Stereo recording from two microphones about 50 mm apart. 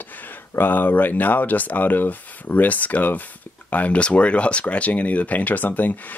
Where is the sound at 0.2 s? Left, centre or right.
Left.